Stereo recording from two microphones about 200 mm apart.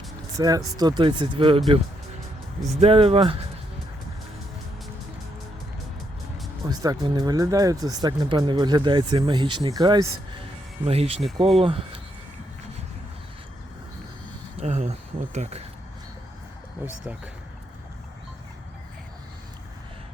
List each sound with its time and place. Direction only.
0.3 s speech: 20° right (ahead or behind)
2.8 s speech: 30° right (ahead or behind)
6.7 s speech: 20° right (ahead or behind)
14.6 s a sound: 35° right (ahead or behind)